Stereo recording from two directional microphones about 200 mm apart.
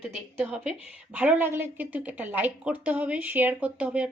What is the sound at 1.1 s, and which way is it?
A woman's voice, 10° right (ahead or behind).